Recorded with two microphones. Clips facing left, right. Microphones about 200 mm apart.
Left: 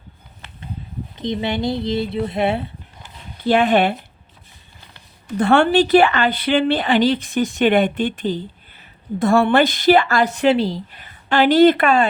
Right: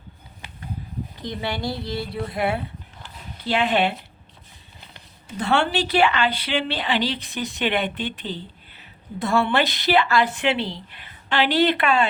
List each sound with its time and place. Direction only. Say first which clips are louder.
0.4 s a sound: even; 10° right (ahead or behind)
1.2 s a woman's voice: left 7 dB; 20° left (ahead or behind)
3.4 s speech: left 6 dB; 50° left (ahead or behind)
5.4 s speech: left 8 dB; 55° left (ahead or behind)